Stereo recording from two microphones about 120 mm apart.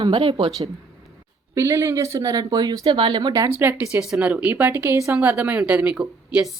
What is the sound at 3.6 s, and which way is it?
Speech, 15° right (ahead or behind).